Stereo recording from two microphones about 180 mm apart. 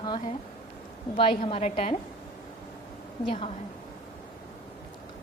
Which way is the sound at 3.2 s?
30° left (ahead or behind).